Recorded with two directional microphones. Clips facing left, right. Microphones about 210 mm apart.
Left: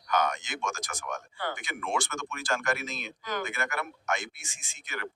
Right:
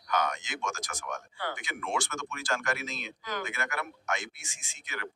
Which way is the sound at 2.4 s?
50° left (ahead or behind).